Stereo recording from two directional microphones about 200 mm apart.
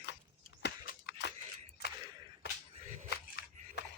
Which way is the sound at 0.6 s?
50° left (ahead or behind).